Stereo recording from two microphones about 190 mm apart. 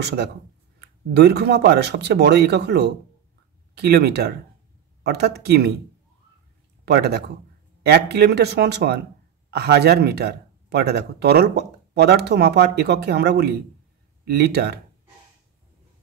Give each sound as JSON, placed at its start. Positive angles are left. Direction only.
{"t": 0.0, "sound": "speech", "side_deg": -60}
{"t": 6.8, "sound": "speech", "side_deg": -55}